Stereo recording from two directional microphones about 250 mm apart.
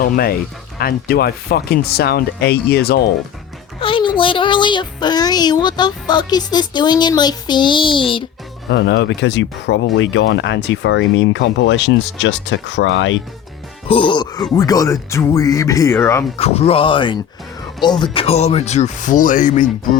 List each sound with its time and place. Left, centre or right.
0.0 s speech: left
3.8 s speech: centre
8.7 s speech: left
13.8 s speech: left
16.4 s speech: left